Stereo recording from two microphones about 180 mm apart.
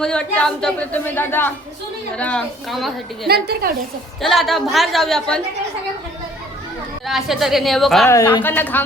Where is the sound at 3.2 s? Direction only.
60° right (ahead or behind).